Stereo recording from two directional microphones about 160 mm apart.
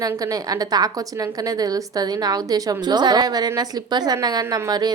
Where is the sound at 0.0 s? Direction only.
20° right (ahead or behind).